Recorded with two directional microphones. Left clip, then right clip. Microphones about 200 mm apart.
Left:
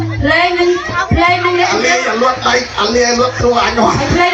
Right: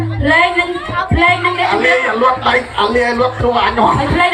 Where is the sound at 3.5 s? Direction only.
55° left (ahead or behind).